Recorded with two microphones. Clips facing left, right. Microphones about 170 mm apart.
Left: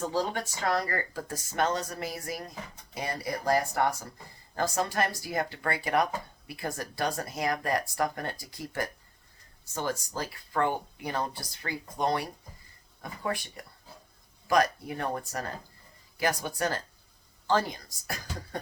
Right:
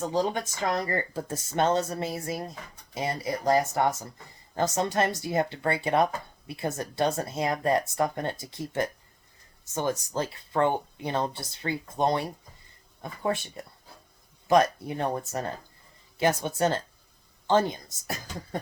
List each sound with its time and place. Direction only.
0.1 s speech: 20° right (ahead or behind)
14.4 s speech: 25° right (ahead or behind)